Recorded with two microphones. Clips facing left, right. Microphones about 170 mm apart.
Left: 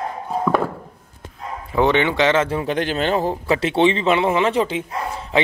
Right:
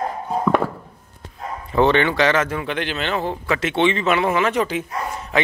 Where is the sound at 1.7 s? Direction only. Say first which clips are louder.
Right 1 dB; 15° left (ahead or behind).